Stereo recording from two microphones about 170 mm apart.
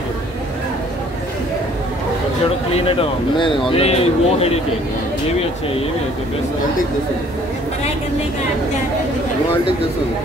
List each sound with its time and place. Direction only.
2.7 s speech: 30° left (ahead or behind)